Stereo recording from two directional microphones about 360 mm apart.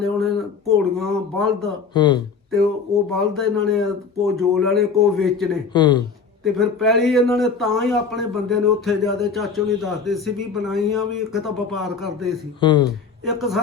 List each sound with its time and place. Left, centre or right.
0.0 s a sound: centre
0.9 s a man's voice: centre
1.9 s speech: centre
2.5 s a man's voice: centre
5.7 s speech: centre
6.4 s a man's voice: centre
12.5 s speech: centre
13.2 s a man's voice: centre